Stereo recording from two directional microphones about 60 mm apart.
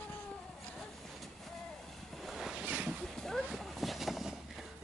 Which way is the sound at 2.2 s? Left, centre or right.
Centre.